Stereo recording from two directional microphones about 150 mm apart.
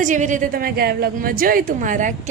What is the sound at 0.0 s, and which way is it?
A woman's voice, 55° right (ahead or behind).